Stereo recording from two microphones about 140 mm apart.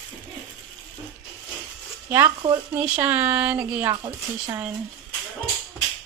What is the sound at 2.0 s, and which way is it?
Speech, 15° right (ahead or behind).